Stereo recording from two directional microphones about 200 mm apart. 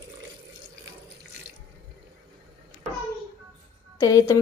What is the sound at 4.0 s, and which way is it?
Speech, 15° left (ahead or behind).